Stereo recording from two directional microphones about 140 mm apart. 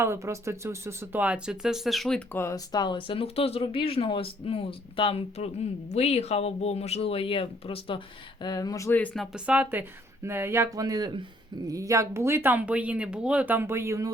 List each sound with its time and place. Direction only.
0.0 s speech: 20° right (ahead or behind); by 2.2 s centre (ahead or behind)
2.3 s speech: 20° left (ahead or behind)
9.0 s speech: centre (ahead or behind); by 14.1 s 20° right (ahead or behind)